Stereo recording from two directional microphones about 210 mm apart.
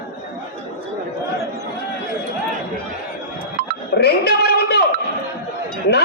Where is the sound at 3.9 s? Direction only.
50° left (ahead or behind).